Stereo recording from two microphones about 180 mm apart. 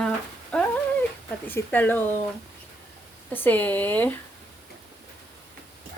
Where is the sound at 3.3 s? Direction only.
10° left (ahead or behind).